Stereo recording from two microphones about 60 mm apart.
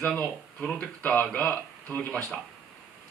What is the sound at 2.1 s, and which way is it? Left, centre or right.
Speech, centre.